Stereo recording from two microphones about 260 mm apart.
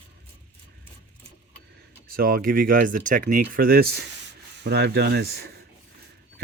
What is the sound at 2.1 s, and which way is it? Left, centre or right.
Speech, right.